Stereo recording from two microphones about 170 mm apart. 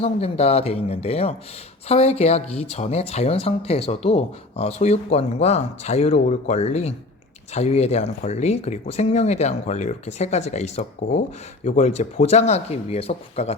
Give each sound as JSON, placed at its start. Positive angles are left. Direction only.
{"t": 0.0, "sound": "speech", "side_deg": 35}